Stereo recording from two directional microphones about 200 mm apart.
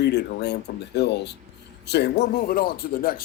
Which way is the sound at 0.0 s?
55° left (ahead or behind).